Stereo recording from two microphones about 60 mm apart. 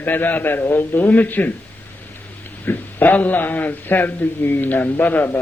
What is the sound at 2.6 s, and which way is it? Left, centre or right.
A man's voice, left.